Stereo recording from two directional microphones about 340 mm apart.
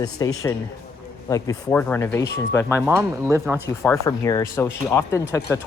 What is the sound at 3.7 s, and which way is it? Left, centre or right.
Speech, centre.